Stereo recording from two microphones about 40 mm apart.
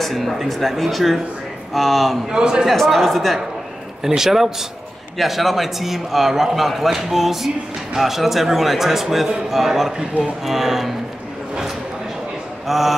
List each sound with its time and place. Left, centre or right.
0.0 s a man's voice: centre
2.3 s a man's voice: centre
2.7 s a man's voice: centre
4.0 s a man's voice: centre
12.6 s speech: centre